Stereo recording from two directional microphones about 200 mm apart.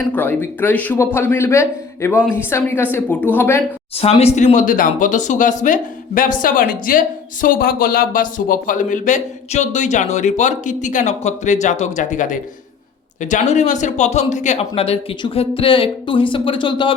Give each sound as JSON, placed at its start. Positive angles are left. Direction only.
{"t": 0.1, "sound": "a man's voice", "side_deg": 10}
{"t": 3.9, "sound": "a man's voice", "side_deg": 30}